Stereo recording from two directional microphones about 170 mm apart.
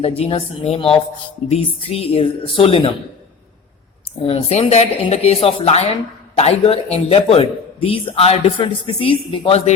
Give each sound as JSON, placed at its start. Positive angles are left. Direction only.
{"t": 0.0, "sound": "a man's voice", "side_deg": 35}
{"t": 4.2, "sound": "a man's voice", "side_deg": 35}